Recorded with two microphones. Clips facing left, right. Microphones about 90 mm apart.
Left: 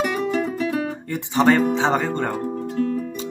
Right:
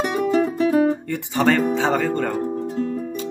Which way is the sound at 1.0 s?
15° left (ahead or behind).